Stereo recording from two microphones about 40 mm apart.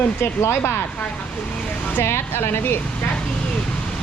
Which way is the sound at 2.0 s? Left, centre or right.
Left.